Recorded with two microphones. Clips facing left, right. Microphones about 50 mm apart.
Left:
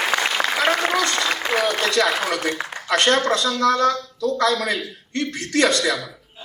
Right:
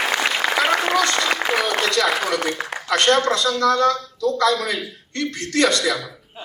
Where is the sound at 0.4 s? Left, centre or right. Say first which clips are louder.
Right 1 dB; centre.